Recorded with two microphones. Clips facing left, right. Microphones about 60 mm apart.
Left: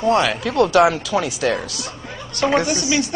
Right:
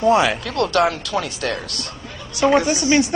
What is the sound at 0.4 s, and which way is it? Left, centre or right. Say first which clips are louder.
Speech: left 4 dB; centre.